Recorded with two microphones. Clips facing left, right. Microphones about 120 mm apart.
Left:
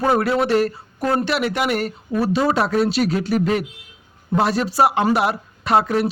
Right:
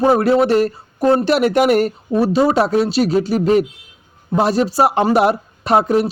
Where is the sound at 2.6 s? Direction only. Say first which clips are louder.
Right 3 dB; 35° right (ahead or behind).